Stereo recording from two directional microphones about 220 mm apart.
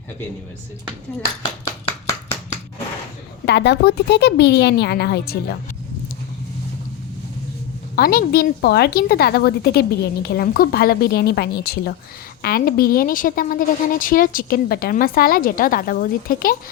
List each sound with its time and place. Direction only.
1.6 s chopping: 10° left (ahead or behind)
3.4 s a woman's voice: 50° left (ahead or behind)
7.9 s a woman's voice: 45° left (ahead or behind)